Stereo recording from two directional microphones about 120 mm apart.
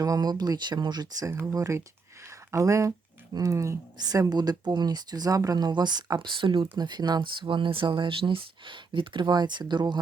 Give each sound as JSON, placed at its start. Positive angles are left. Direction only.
{"t": 0.0, "sound": "speech", "side_deg": -30}
{"t": 1.3, "sound": "speech", "side_deg": -20}